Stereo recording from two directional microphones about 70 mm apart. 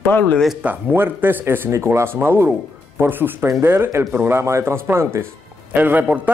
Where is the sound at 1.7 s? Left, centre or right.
Right.